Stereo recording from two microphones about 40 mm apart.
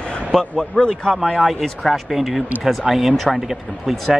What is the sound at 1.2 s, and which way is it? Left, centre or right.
Speech, centre.